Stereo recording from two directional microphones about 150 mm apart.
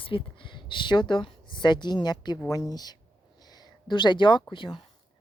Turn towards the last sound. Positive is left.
turn(degrees=35)  # may be behind; listen again after turning